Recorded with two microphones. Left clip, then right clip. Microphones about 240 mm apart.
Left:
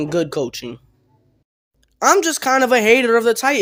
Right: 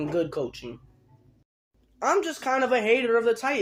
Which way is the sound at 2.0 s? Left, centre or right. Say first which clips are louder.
Left 10 dB; left.